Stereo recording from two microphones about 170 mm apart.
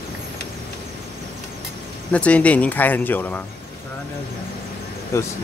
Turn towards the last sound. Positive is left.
turn(degrees=15)  # may be behind; listen again after turning